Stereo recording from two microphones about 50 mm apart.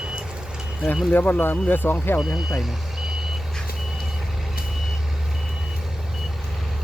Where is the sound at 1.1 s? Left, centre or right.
Left.